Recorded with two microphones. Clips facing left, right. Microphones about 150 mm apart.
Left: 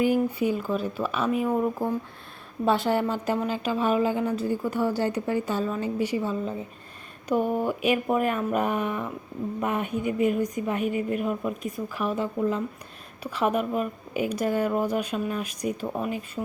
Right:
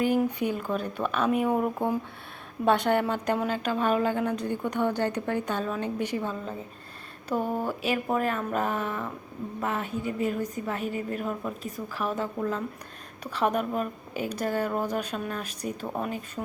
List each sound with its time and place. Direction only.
0.3 s a woman's voice: 5° left (ahead or behind)
11.6 s speech: 35° right (ahead or behind)
12.1 s a woman's voice: 10° left (ahead or behind)